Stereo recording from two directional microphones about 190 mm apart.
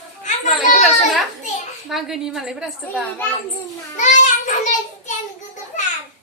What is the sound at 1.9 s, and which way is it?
A woman's voice, centre (ahead or behind).